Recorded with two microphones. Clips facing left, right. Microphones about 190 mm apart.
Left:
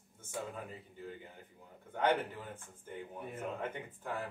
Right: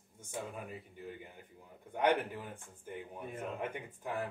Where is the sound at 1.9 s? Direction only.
15° right (ahead or behind).